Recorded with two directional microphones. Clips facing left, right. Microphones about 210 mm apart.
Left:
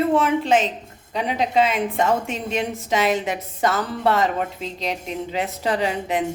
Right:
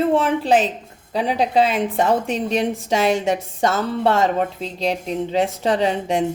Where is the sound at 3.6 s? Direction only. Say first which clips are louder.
Right 3 dB; 30° right (ahead or behind).